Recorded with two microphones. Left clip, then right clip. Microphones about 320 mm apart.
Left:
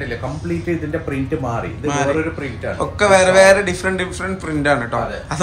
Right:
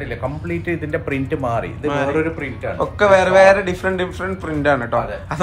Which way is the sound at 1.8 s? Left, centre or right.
Centre.